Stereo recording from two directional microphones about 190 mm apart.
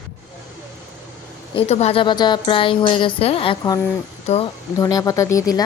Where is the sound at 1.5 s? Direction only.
35° left (ahead or behind).